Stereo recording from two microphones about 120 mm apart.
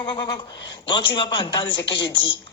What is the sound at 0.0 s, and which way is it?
A man's voice, 40° left (ahead or behind).